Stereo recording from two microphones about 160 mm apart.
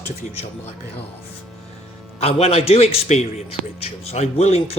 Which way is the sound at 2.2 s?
40° left (ahead or behind).